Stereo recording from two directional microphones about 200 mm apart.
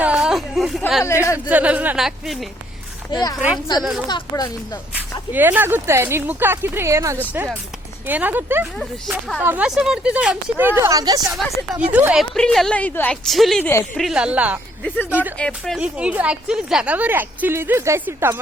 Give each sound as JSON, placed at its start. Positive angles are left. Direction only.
{"t": 0.0, "sound": "a sound", "side_deg": -5}
{"t": 1.0, "sound": "speech", "side_deg": 15}
{"t": 1.5, "sound": "speech", "side_deg": -5}
{"t": 3.1, "sound": "speech", "side_deg": 20}
{"t": 3.3, "sound": "a woman's voice", "side_deg": 0}
{"t": 4.1, "sound": "speech", "side_deg": 20}
{"t": 4.9, "sound": "speech", "side_deg": -10}
{"t": 8.8, "sound": "a woman's voice", "side_deg": 0}
{"t": 9.4, "sound": "speech", "side_deg": -10}
{"t": 11.9, "sound": "a woman's voice", "side_deg": -5}
{"t": 14.0, "sound": "a woman's voice", "side_deg": -5}